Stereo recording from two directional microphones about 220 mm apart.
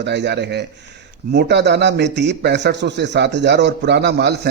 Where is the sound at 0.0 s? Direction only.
50° right (ahead or behind).